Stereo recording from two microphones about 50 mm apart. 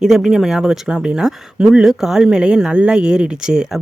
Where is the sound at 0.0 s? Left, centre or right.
Centre.